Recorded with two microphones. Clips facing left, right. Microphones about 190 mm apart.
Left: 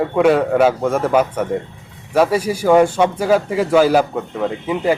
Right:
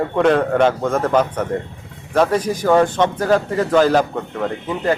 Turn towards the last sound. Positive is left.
turn(degrees=10)  # may be behind; listen again after turning